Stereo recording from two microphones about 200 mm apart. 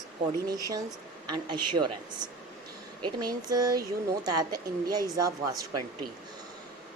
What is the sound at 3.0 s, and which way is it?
A woman's voice, 20° right (ahead or behind).